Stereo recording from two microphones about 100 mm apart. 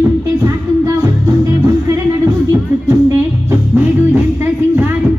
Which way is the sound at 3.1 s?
25° right (ahead or behind).